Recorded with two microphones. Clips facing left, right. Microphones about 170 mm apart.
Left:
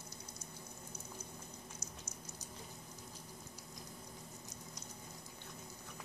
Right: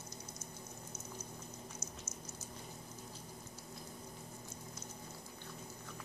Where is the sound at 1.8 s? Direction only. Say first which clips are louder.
Right 2 dB; 35° left (ahead or behind).